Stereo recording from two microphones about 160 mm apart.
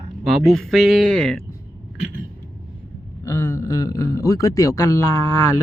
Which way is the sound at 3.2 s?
15° left (ahead or behind).